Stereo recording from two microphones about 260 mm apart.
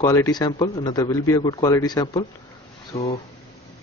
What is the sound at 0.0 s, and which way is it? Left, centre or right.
Speech, centre.